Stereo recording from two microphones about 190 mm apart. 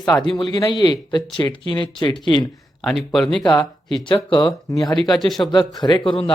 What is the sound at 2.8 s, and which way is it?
Speech, centre (ahead or behind).